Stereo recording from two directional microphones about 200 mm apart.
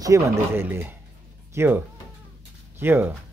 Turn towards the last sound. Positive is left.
turn(degrees=-10)  # may be behind; listen again after turning